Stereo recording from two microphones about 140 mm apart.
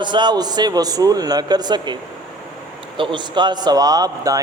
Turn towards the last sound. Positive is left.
turn(degrees=-25)  # may be behind; listen again after turning